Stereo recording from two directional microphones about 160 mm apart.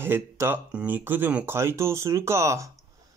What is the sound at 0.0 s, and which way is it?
Speech, 15° right (ahead or behind).